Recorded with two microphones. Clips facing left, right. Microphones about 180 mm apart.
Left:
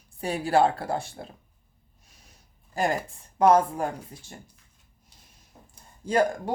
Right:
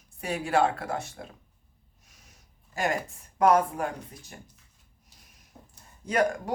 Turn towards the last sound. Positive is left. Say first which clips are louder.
# left 2 dB
turn(degrees=30)  # may be behind; listen again after turning